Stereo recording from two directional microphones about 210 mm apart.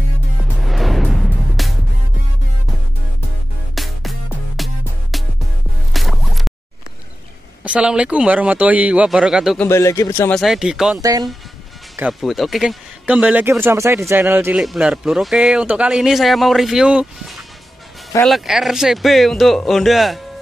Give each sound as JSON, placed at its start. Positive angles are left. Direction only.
{"t": 0.7, "sound": "music", "side_deg": 0}
{"t": 3.7, "sound": "music", "side_deg": 0}
{"t": 7.6, "sound": "speech", "side_deg": -5}
{"t": 9.7, "sound": "speech", "side_deg": 15}
{"t": 10.4, "sound": "speech", "side_deg": 0}
{"t": 11.0, "sound": "speech", "side_deg": -15}
{"t": 12.0, "sound": "speech", "side_deg": 0}